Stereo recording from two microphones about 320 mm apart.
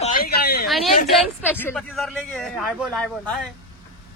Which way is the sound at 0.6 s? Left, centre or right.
Centre.